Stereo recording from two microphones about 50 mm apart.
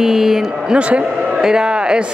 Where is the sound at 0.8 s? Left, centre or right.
Right.